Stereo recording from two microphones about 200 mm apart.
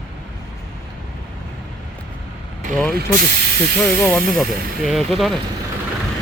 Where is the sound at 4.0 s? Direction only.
Centre (ahead or behind).